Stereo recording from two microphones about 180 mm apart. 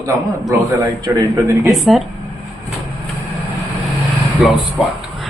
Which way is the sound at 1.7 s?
Centre (ahead or behind).